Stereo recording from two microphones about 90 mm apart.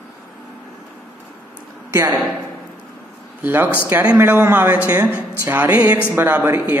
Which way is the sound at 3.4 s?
20° right (ahead or behind).